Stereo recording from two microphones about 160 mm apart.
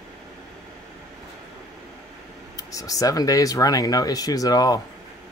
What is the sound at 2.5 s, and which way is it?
Speech, 20° left (ahead or behind).